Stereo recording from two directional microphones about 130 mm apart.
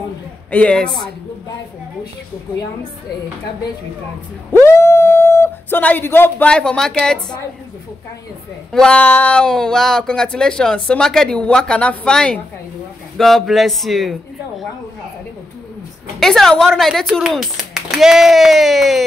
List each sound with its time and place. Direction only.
0.5 s speech: 10° left (ahead or behind)
4.5 s speech: 20° left (ahead or behind)
8.7 s speech: 10° left (ahead or behind)
16.2 s speech: 5° left (ahead or behind)